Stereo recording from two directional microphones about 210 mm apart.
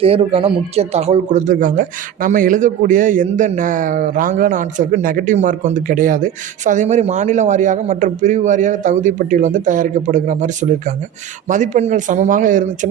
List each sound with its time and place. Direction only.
0.0 s a man's voice: 25° right (ahead or behind)